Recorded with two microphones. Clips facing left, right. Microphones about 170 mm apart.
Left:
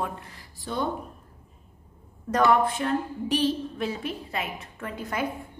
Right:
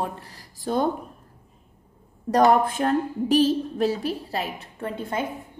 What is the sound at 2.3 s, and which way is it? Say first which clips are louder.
A woman's voice: right 3 dB; 40° right (ahead or behind).